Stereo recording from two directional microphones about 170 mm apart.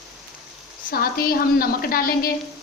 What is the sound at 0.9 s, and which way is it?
A woman's voice, 60° left (ahead or behind).